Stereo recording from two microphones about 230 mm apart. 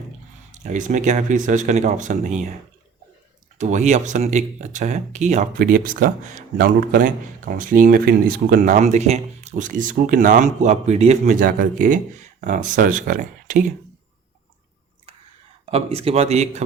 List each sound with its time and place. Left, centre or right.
0.5 s speech: right
3.6 s speech: right
15.6 s speech: right